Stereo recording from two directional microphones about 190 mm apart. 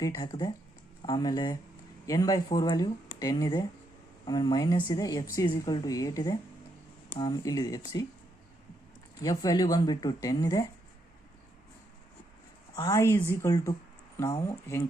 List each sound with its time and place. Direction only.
0.0 s speech: 20° left (ahead or behind)
9.2 s speech: 20° left (ahead or behind)
12.7 s a woman's voice: 20° left (ahead or behind)